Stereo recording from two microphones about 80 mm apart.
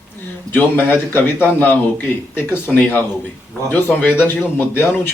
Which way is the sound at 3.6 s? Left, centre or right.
Left.